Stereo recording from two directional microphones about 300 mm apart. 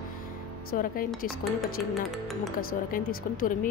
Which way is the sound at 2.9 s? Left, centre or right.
Left.